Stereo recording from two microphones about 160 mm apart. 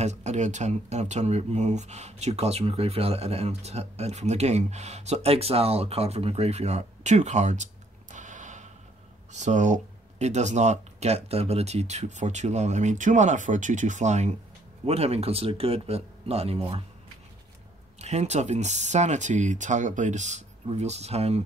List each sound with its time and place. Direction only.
0.0 s speech: 45° right (ahead or behind)
18.0 s speech: 45° right (ahead or behind)